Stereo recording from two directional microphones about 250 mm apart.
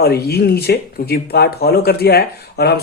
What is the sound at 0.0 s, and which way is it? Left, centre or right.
Speech, left.